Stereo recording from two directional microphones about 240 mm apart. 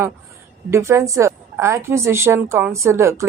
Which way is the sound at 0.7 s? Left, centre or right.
Centre.